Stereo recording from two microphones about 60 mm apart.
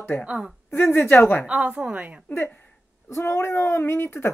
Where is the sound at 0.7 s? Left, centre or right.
Left.